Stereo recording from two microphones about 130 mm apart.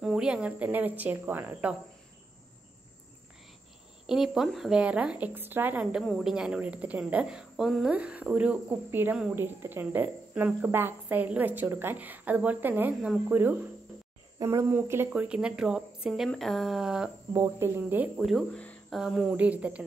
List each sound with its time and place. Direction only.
0.0 s speech: 5° right (ahead or behind)
4.1 s a woman's voice: 5° right (ahead or behind)
17.3 s speech: 20° right (ahead or behind)
18.1 s speech: centre (ahead or behind)
18.9 s speech: 5° right (ahead or behind)